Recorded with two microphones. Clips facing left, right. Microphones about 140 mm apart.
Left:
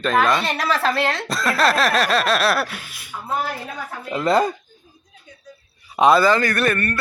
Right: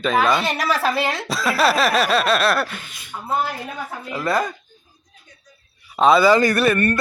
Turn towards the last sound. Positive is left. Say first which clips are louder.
# right 3 dB
turn(degrees=-10)  # may be behind; listen again after turning